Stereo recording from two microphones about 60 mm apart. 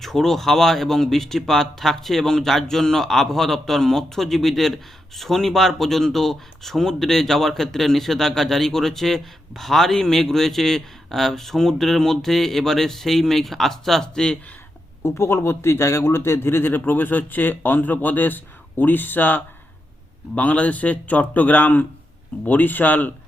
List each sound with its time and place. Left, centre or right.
0.0 s speech: centre
15.0 s a man's voice: left